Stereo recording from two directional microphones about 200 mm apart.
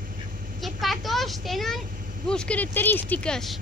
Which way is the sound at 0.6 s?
Centre (ahead or behind).